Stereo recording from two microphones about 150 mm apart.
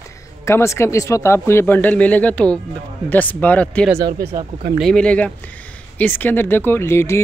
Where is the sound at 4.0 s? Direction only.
90° right.